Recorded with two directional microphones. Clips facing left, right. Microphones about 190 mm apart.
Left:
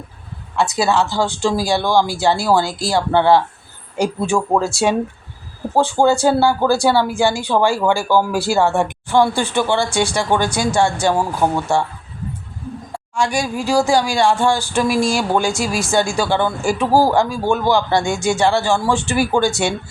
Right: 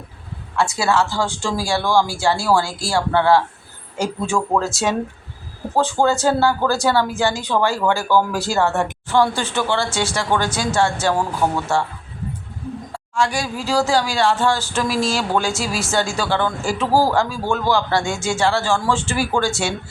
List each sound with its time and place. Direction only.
0.8 s speech: 15° left (ahead or behind)
12.9 s speech: 15° left (ahead or behind)